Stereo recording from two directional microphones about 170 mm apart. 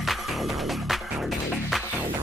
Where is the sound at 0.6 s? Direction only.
Centre (ahead or behind).